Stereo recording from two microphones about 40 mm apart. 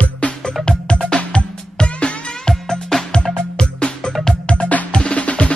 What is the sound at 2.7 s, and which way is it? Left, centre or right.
Music, centre.